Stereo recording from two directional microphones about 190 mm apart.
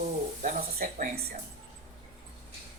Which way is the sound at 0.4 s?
40° right (ahead or behind).